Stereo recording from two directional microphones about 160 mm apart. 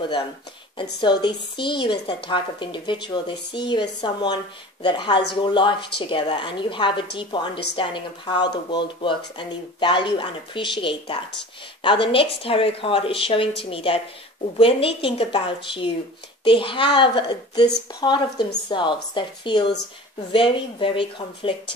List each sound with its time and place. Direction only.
1.2 s a woman's voice: 30° left (ahead or behind)